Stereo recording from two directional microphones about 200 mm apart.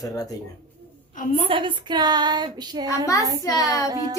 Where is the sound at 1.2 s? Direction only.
40° left (ahead or behind).